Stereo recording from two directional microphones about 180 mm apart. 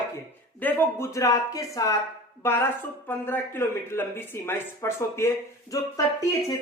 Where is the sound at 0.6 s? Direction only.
10° left (ahead or behind).